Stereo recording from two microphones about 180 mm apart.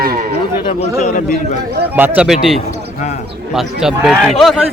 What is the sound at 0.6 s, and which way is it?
Speech, 35° left (ahead or behind).